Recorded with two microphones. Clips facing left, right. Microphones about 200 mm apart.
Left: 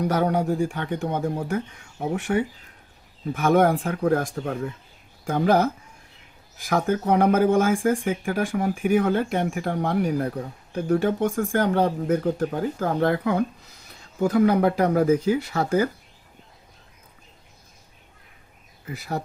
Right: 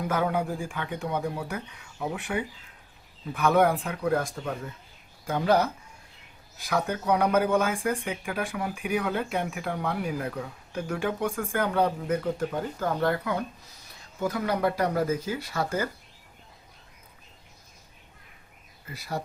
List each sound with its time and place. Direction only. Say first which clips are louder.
0.0 s speech: left 5 dB; 40° left (ahead or behind)